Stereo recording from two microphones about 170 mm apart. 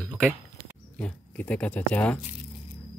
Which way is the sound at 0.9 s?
5° left (ahead or behind).